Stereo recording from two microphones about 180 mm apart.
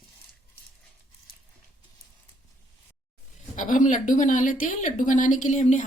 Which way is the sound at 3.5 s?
45° left (ahead or behind).